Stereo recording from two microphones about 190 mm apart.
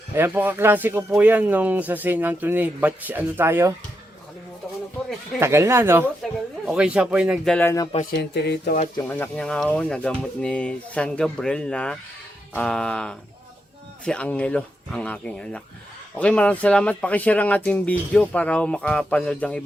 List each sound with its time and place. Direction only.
0.1 s speech: 10° right (ahead or behind)
5.4 s speech: 15° right (ahead or behind)
7.5 s speech: 15° left (ahead or behind)
8.1 s speech: 60° left (ahead or behind)
9.0 s speech: 10° left (ahead or behind)